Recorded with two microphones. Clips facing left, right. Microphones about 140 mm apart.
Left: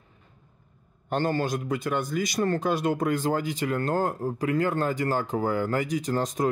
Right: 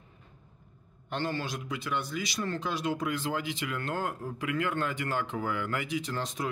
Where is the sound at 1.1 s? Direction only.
45° left (ahead or behind).